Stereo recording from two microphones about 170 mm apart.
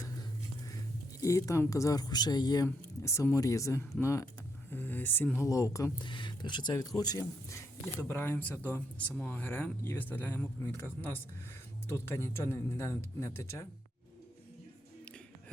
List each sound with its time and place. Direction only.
1.2 s speech: 20° left (ahead or behind)